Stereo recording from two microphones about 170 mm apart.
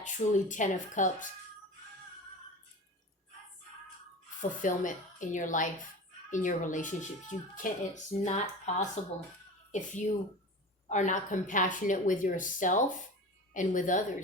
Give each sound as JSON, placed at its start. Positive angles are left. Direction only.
{"t": 0.0, "sound": "speech", "side_deg": 45}
{"t": 4.4, "sound": "speech", "side_deg": 50}